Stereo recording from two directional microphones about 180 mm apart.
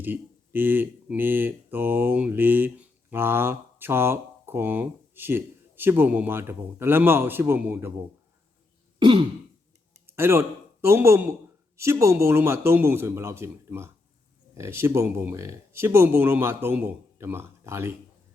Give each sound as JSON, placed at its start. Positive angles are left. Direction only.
{"t": 0.0, "sound": "speech", "side_deg": -10}
{"t": 9.0, "sound": "throat clearing", "side_deg": -25}
{"t": 10.1, "sound": "a man's voice", "side_deg": -15}